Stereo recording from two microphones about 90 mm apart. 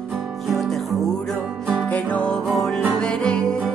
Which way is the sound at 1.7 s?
15° left (ahead or behind).